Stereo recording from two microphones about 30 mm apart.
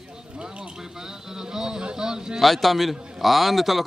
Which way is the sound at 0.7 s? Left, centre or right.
Centre.